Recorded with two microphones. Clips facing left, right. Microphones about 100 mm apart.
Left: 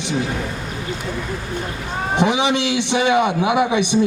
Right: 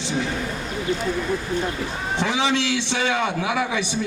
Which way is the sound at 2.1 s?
15° left (ahead or behind).